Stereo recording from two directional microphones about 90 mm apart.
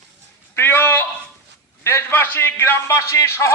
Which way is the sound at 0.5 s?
25° left (ahead or behind).